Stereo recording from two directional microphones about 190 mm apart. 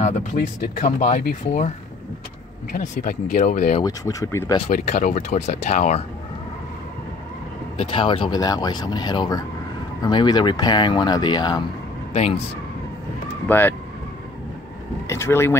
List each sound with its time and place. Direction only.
0.8 s speech: 40° left (ahead or behind)
2.7 s speech: 45° left (ahead or behind)
3.8 s speech: 15° left (ahead or behind)
4.6 s speech: 40° left (ahead or behind)
7.7 s speech: 30° left (ahead or behind)
12.1 s a man's voice: 35° left (ahead or behind)
13.5 s speech: 10° left (ahead or behind)
15.0 s speech: 15° left (ahead or behind)